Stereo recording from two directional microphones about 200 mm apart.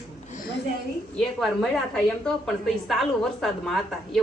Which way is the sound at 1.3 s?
Centre (ahead or behind).